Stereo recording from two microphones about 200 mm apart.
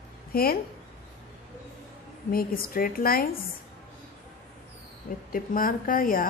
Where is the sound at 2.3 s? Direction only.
45° left (ahead or behind).